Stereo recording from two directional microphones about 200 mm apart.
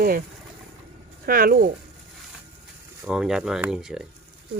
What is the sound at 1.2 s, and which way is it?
Speech, 45° right (ahead or behind).